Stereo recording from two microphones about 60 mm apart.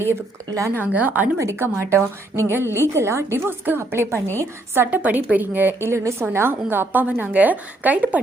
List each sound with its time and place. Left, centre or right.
0.7 s a woman's voice: right
1.4 s a woman's voice: right
4.9 s a woman's voice: right
5.9 s a woman's voice: right
6.3 s a woman's voice: right